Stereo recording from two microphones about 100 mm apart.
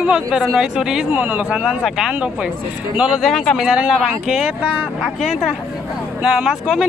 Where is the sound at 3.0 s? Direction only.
Centre (ahead or behind).